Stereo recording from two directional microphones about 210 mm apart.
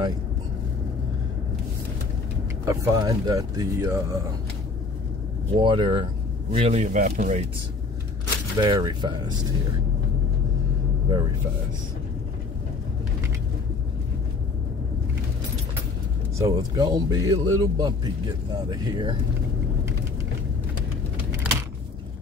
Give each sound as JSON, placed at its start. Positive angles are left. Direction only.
{"t": 2.6, "sound": "speech", "side_deg": -15}
{"t": 5.5, "sound": "speech", "side_deg": -25}
{"t": 8.5, "sound": "speech", "side_deg": -20}
{"t": 16.3, "sound": "speech", "side_deg": -15}